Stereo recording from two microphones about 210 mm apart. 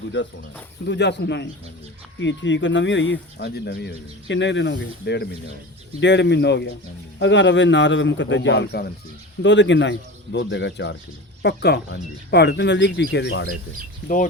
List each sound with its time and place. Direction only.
0.9 s speech: 55° left (ahead or behind)